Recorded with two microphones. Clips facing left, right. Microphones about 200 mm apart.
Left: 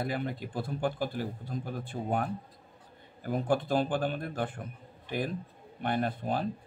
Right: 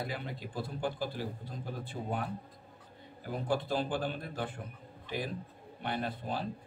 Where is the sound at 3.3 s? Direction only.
50° left (ahead or behind).